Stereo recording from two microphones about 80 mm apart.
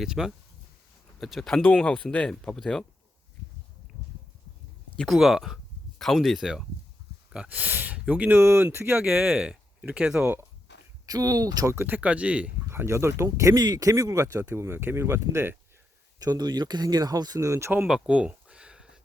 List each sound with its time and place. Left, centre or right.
0.0 s speech: centre
5.0 s speech: centre
7.3 s speech: centre
8.4 s speech: right
9.0 s speech: centre
11.0 s speech: right
11.7 s speech: right
11.9 s speech: centre
12.7 s speech: right
14.4 s speech: right
16.1 s speech: right
17.8 s a sound: centre